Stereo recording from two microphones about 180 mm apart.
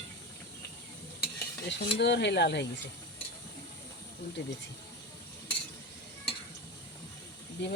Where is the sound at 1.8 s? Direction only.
70° left (ahead or behind).